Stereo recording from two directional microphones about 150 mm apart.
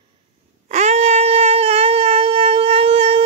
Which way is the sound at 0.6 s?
50° right (ahead or behind).